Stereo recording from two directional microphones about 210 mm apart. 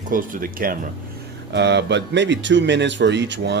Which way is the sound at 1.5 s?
55° right (ahead or behind).